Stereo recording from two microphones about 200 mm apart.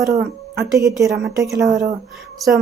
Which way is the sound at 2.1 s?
Centre (ahead or behind).